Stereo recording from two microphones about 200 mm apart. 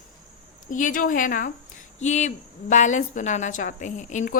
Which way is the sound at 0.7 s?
40° left (ahead or behind).